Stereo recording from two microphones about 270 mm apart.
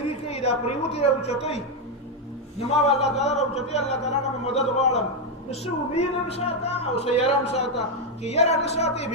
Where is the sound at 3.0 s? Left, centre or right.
Left.